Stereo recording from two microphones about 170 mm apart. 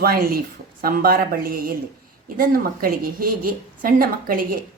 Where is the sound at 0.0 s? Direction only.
60° right (ahead or behind).